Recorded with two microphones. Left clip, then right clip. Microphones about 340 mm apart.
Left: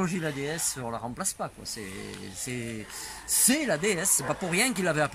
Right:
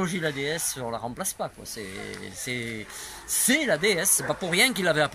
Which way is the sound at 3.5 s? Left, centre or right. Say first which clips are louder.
Right 4 dB; centre.